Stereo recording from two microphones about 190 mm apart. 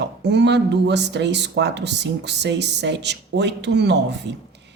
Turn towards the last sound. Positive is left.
turn(degrees=-65)  # may be behind; listen again after turning